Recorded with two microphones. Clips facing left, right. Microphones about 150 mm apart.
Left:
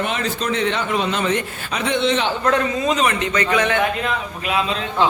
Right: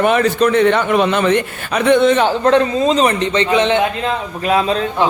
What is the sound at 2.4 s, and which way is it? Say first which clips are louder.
Speech: right 6 dB; 30° right (ahead or behind).